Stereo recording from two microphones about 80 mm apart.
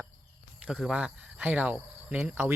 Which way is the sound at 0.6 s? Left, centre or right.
Centre.